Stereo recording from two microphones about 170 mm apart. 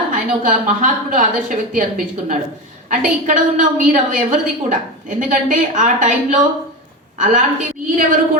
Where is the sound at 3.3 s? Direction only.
50° right (ahead or behind).